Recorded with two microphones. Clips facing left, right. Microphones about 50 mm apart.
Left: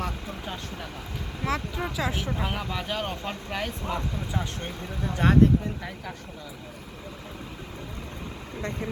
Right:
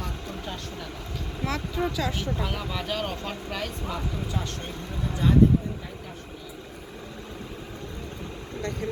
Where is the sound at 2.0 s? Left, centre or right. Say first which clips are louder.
Even; left.